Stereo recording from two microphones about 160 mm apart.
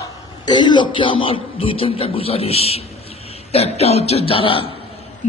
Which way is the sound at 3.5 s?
40° left (ahead or behind).